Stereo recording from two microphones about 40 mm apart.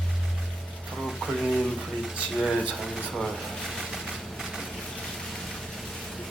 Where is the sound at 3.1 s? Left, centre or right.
Centre.